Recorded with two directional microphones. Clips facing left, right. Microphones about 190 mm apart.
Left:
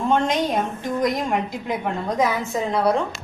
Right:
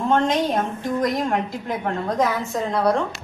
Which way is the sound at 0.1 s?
Centre (ahead or behind).